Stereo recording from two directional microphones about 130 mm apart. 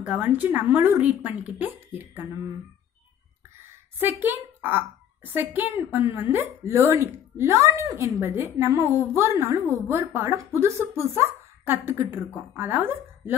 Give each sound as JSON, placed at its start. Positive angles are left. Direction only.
{"t": 0.0, "sound": "speech", "side_deg": -15}
{"t": 4.0, "sound": "a child's voice", "side_deg": -15}